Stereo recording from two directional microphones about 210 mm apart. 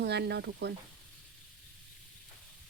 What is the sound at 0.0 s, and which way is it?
Speech, 55° right (ahead or behind).